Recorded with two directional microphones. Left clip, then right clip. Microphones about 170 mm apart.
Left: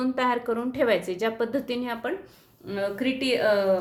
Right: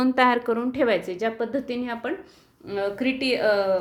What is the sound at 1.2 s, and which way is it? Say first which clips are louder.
Speech: even; centre (ahead or behind).